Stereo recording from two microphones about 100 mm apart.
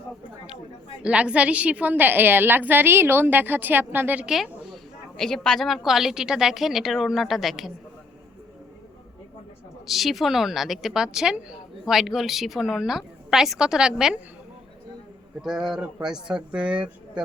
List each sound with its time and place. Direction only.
1.0 s a woman's voice: 10° right (ahead or behind)
4.4 s a woman's voice: 5° left (ahead or behind)
9.8 s a woman's voice: centre (ahead or behind)
15.4 s a woman's voice: 5° right (ahead or behind)
16.7 s speech: 55° right (ahead or behind)